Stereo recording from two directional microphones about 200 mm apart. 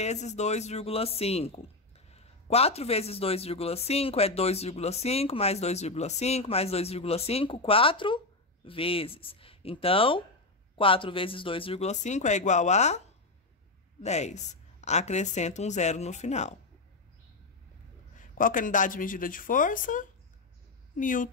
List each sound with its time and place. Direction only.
0.0 s speech: 35° left (ahead or behind)
14.0 s speech: 35° left (ahead or behind)
18.4 s a woman's voice: 40° left (ahead or behind)